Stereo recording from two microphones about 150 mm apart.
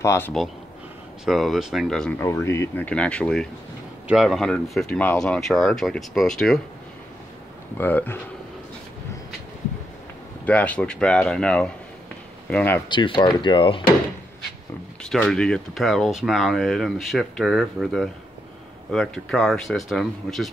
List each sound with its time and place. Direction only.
0.0 s speech: 20° left (ahead or behind)
1.2 s speech: centre (ahead or behind)
2.1 s speech: 20° left (ahead or behind)
2.9 s speech: 10° left (ahead or behind)
7.7 s speech: 10° left (ahead or behind)
10.4 s speech: 10° left (ahead or behind)
12.8 s speech: 35° left (ahead or behind)
15.0 s speech: 5° left (ahead or behind)